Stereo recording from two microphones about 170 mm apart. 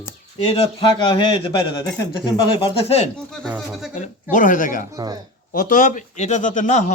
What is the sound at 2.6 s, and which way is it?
Speech, 35° left (ahead or behind).